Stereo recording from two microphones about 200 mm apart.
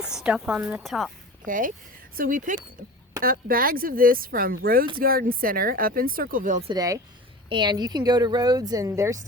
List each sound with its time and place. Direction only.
0.0 s a woman's voice: 5° right (ahead or behind)
1.5 s speech: 40° right (ahead or behind)
6.7 s speech: 20° right (ahead or behind)